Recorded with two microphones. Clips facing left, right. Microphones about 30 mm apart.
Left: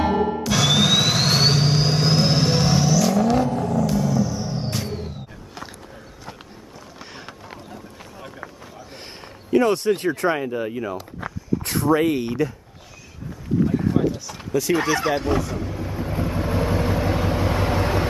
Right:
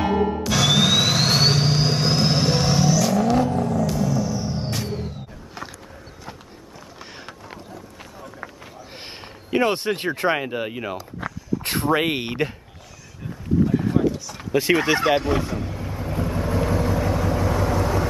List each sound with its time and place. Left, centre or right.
0.4 s music: centre
3.9 s a sound: centre
7.0 s run: centre
8.9 s speech: right
13.7 s a sound: centre
13.9 s a sound: centre
14.5 s speech: right
15.3 s speech: centre
15.6 s vehicle: centre; by 18.0 s left